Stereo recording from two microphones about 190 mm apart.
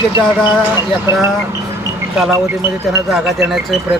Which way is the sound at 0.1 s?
25° left (ahead or behind).